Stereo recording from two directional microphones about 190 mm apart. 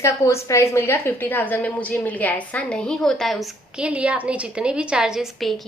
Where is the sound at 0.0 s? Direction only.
15° left (ahead or behind).